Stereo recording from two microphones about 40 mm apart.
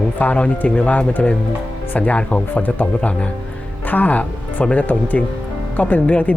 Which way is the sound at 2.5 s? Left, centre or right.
Left.